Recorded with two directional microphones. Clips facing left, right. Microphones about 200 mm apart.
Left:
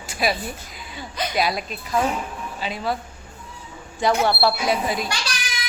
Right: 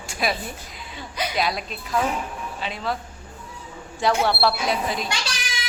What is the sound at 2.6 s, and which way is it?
Speech, 5° left (ahead or behind).